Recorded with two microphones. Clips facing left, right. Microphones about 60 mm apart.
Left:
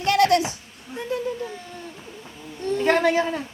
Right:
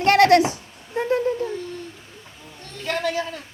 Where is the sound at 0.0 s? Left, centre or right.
Right.